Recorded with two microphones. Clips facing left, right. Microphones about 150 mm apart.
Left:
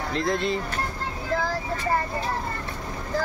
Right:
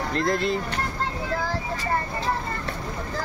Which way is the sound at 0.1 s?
Centre (ahead or behind).